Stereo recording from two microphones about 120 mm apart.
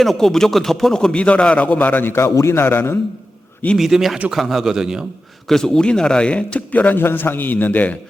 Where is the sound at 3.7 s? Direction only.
Centre (ahead or behind).